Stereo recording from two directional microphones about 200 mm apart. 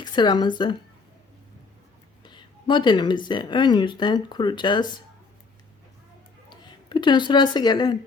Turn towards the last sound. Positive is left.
turn(degrees=20)  # may be behind; listen again after turning